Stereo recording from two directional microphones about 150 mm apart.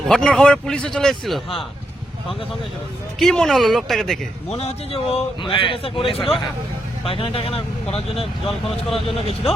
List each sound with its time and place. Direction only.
0.1 s a man's voice: 5° left (ahead or behind)
3.2 s a man's voice: 5° left (ahead or behind)
4.5 s speech: 40° left (ahead or behind)
9.0 s speech: 40° left (ahead or behind)